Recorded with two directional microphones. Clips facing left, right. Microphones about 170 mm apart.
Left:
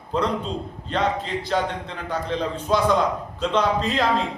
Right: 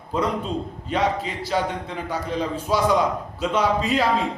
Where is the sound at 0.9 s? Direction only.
5° right (ahead or behind).